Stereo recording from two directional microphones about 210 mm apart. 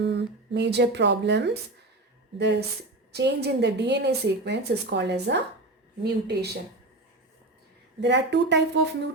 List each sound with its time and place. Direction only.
0.0 s a woman's voice: 55° right (ahead or behind)
8.0 s speech: 55° right (ahead or behind)